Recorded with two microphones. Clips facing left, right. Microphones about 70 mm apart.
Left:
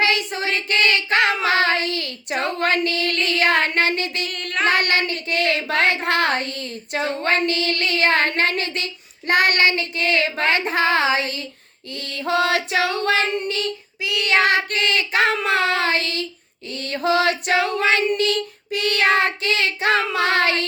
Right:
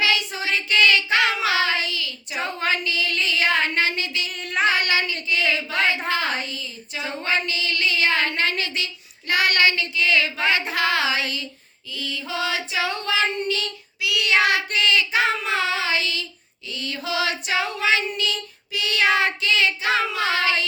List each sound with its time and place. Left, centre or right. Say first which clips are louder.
0.0 s child singing: left 2 dB; left
4.3 s child singing: left 1 dB; centre
4.6 s child singing: left 2 dB; left
6.1 s female singing: left 4 dB; left
11.9 s child singing: left 6 dB; left
13.3 s female singing: left 2 dB; left